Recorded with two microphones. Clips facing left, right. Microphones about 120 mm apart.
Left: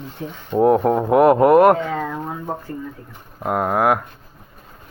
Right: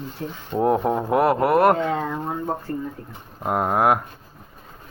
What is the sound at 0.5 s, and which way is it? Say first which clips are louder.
Speech: left 5 dB; 10° left (ahead or behind).